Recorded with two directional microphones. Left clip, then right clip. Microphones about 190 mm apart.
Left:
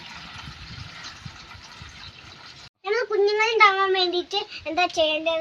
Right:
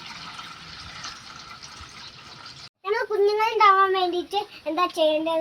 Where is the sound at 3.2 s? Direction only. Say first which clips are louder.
Even; 15° left (ahead or behind).